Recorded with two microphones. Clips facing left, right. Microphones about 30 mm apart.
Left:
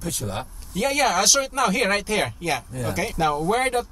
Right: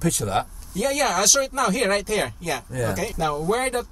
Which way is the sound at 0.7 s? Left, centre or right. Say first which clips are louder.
Even; left.